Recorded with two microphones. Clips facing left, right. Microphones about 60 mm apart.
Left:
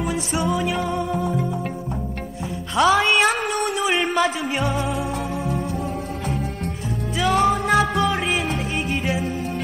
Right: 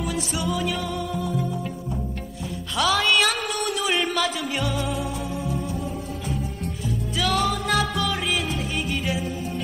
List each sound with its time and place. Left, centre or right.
0.0 s music: left
2.7 s a sound: left
4.6 s music: left
5.1 s music: left
7.2 s music: left
8.5 s music: left